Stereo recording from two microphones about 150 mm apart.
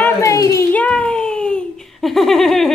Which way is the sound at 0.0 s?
20° left (ahead or behind).